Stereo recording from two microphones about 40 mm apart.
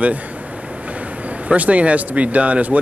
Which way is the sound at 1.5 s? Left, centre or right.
Right.